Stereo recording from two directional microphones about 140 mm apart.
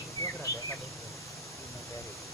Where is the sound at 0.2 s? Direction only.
20° left (ahead or behind).